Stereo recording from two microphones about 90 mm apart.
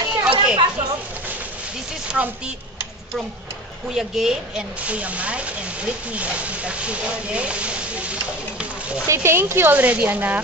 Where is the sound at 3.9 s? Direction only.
5° right (ahead or behind).